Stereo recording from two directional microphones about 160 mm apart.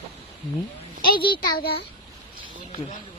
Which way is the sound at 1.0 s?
30° left (ahead or behind).